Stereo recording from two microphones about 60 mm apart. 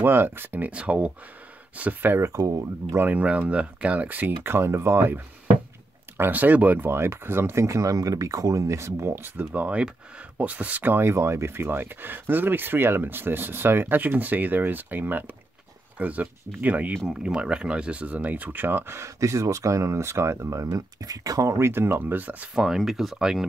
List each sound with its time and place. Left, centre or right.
0.0 s speech: right; by 1.1 s centre
1.8 s speech: right
2.2 s speech: right
3.0 s speech: right
3.3 s speech: right
6.9 s speech: right
9.5 s speech: right
17.1 s speech: centre; by 18.9 s right
18.9 s speech: right
20.7 s speech: right
21.5 s speech: right
22.5 s speech: centre